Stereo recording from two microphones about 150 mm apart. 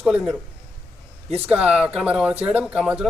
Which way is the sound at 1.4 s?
5° right (ahead or behind).